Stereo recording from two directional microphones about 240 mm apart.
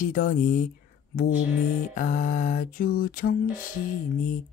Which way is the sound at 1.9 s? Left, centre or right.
Left.